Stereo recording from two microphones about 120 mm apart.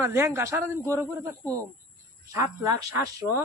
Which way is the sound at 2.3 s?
30° right (ahead or behind).